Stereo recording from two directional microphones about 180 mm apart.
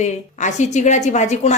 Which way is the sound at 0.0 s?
40° left (ahead or behind).